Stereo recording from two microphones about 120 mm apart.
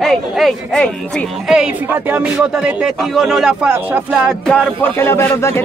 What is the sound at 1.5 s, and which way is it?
Speech, 10° right (ahead or behind).